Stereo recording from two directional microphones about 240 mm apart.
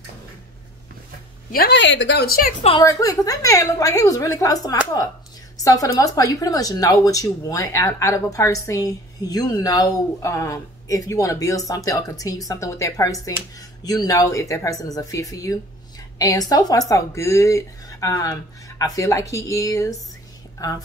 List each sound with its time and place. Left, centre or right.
1.5 s speech: left
2.8 s speech: centre